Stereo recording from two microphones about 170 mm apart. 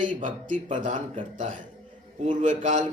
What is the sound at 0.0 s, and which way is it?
Speech, 50° right (ahead or behind).